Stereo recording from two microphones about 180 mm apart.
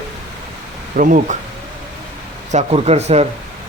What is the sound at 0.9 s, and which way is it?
Speech, 45° right (ahead or behind).